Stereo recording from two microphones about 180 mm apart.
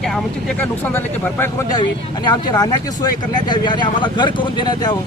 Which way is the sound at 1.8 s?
25° left (ahead or behind).